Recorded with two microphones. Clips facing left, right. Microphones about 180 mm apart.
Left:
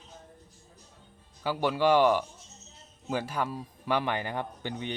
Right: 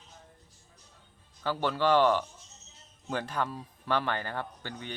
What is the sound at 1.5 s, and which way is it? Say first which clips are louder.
A man's voice: left 2 dB; 10° left (ahead or behind).